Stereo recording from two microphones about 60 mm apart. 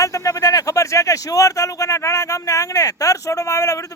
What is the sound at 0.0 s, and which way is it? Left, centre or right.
Speech, left.